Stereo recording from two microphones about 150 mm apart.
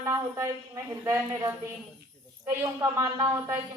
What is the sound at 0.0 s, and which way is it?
A man's voice, 20° right (ahead or behind).